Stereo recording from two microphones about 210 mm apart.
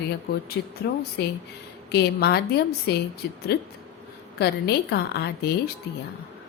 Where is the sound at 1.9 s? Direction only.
50° left (ahead or behind).